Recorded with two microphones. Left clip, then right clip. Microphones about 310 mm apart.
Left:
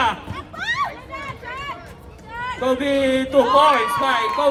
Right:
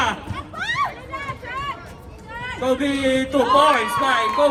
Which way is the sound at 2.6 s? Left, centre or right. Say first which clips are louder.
Left 2 dB; left.